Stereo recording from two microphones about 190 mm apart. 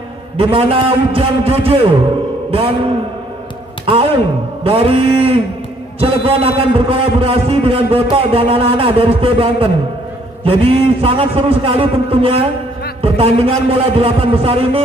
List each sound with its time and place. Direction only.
0.4 s a man's voice: 30° right (ahead or behind)
3.8 s a man's voice: 30° right (ahead or behind)